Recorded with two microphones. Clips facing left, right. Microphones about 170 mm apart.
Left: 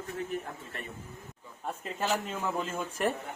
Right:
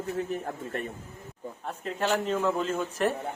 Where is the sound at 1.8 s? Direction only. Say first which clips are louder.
Right 5 dB; 5° left (ahead or behind).